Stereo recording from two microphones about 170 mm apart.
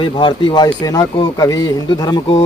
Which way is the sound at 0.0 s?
30° left (ahead or behind).